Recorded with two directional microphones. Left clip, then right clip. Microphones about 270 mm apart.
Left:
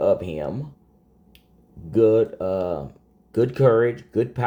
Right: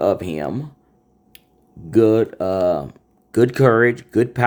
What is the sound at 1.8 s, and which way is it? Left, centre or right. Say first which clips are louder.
Speech: right 2 dB; right.